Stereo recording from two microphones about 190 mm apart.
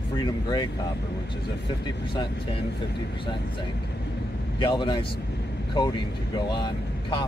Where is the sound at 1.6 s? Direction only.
25° left (ahead or behind).